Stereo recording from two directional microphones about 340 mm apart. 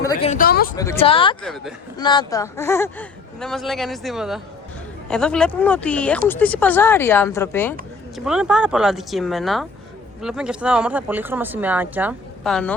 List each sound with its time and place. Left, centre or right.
0.0 s speech: centre
0.8 s speech: centre
1.4 s speech: centre
2.0 s speech: centre